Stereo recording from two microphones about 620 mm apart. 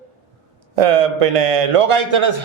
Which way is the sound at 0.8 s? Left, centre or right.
Right.